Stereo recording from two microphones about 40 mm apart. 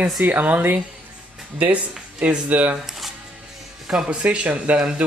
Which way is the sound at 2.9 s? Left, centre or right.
Centre.